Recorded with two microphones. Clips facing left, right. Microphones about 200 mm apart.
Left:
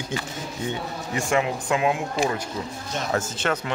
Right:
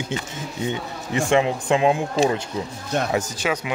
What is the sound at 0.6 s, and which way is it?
Speech, 25° right (ahead or behind).